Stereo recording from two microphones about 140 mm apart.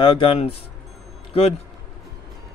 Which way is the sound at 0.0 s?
40° left (ahead or behind).